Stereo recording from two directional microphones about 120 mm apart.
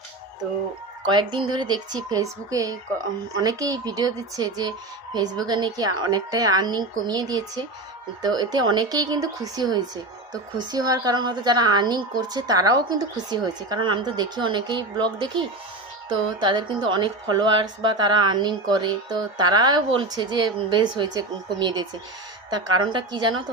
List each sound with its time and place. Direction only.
1.0 s a woman's voice: 40° right (ahead or behind)